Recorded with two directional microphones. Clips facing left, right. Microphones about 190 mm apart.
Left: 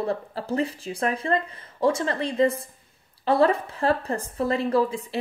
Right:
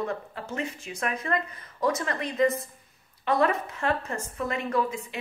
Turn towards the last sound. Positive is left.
turn(degrees=30)  # may be behind; listen again after turning